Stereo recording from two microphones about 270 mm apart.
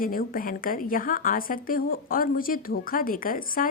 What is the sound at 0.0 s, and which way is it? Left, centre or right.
A woman's voice, left.